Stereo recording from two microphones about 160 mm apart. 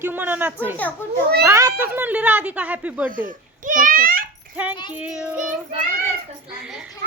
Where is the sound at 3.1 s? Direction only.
55° right (ahead or behind).